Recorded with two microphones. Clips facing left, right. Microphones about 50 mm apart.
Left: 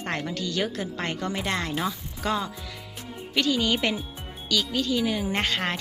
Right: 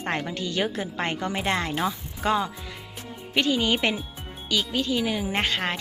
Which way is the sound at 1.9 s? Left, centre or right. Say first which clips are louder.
Right 3 dB; right.